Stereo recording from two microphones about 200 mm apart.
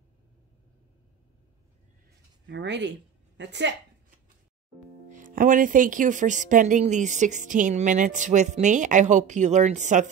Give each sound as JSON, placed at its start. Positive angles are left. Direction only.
{"t": 2.4, "sound": "speech", "side_deg": -60}
{"t": 5.0, "sound": "speech", "side_deg": -40}